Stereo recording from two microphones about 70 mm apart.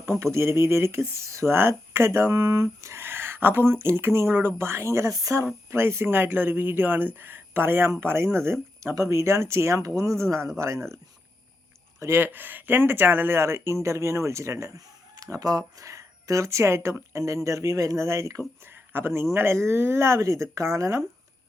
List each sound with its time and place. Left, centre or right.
0.0 s speech: right
5.7 s speech: right
11.9 s speech: right
15.1 s speech: right
18.7 s speech: right